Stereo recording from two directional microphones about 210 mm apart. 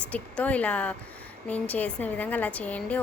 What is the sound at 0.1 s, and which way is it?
A woman's voice, 5° left (ahead or behind).